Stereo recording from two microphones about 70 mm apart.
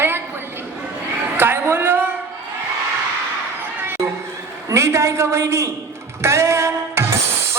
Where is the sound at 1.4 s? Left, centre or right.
Right.